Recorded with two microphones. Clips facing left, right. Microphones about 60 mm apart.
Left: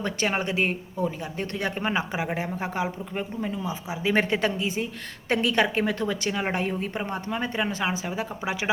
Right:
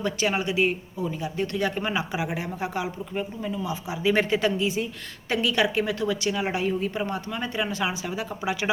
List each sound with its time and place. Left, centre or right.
0.0 s speech: left